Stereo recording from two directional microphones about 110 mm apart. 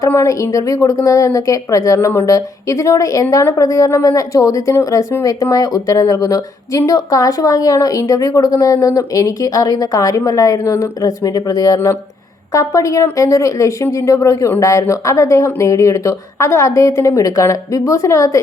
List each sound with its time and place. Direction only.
0.0 s a woman's voice: 25° left (ahead or behind)